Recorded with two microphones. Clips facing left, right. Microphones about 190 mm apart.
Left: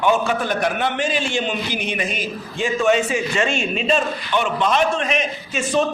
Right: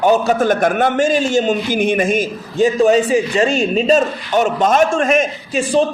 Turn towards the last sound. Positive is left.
turn(degrees=-30)  # may be behind; listen again after turning